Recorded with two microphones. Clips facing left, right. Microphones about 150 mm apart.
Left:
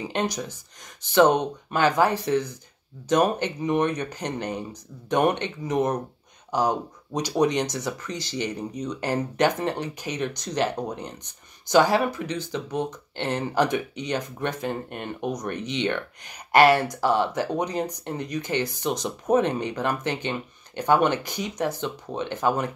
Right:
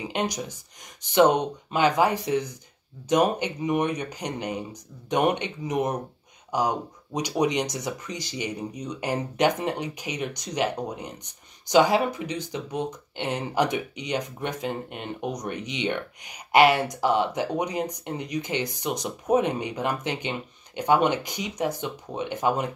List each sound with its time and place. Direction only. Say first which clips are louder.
0.0 s speech: left 1 dB; 15° right (ahead or behind)